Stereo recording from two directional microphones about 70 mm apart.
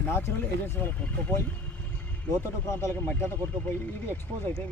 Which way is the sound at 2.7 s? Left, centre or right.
Left.